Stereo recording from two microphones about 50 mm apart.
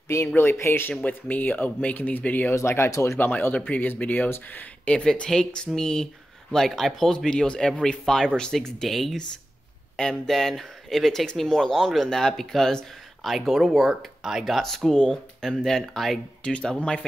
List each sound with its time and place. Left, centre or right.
0.4 s speech: left
1.0 s speech: left
2.9 s speech: left
3.2 s speech: left
4.9 s a man's voice: centre
16.4 s speech: centre